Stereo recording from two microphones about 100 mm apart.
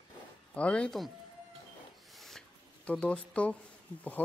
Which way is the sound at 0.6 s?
10° left (ahead or behind).